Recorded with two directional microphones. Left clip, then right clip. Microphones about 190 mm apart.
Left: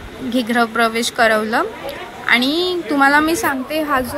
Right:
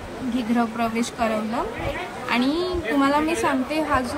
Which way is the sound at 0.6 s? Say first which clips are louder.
Left 9 dB; 10° left (ahead or behind).